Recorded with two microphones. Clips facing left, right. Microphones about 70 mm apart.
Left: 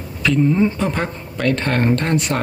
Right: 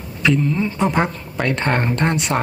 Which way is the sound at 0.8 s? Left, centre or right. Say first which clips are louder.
Right 3 dB; centre.